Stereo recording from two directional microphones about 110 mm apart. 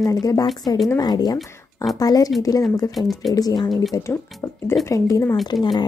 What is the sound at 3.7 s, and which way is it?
Speech, centre (ahead or behind).